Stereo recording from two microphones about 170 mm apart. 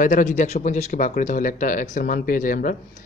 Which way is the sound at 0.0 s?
50° left (ahead or behind).